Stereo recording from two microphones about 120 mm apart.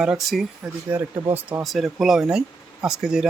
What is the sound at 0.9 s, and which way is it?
Speech, 15° right (ahead or behind).